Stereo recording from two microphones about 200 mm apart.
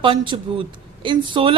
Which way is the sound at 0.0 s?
25° right (ahead or behind).